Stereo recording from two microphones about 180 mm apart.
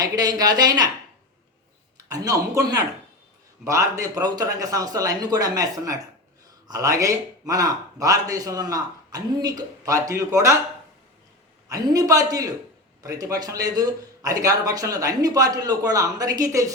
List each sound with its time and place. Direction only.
0.0 s a man's voice: 20° right (ahead or behind)
2.0 s a man's voice: 20° right (ahead or behind)
11.7 s a man's voice: 20° right (ahead or behind)